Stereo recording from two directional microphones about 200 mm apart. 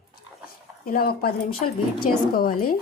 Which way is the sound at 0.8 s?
50° left (ahead or behind).